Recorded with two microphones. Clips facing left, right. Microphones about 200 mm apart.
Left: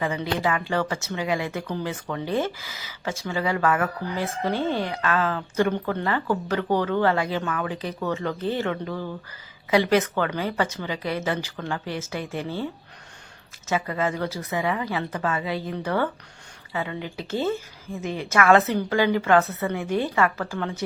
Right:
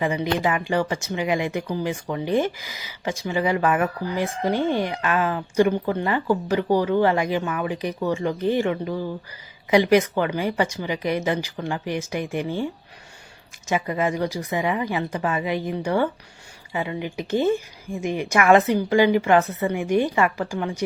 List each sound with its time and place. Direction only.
0.0 s speech: 15° right (ahead or behind)
13.7 s speech: 15° right (ahead or behind)